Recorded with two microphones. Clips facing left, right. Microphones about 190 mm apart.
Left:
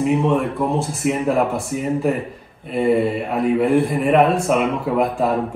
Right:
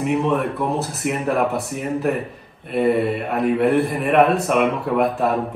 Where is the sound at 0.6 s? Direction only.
5° right (ahead or behind).